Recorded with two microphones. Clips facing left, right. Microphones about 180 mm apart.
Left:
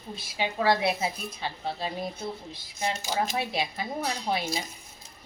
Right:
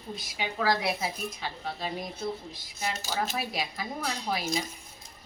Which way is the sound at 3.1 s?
25° left (ahead or behind).